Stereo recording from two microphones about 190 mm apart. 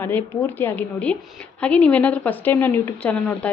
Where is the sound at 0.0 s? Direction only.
10° left (ahead or behind).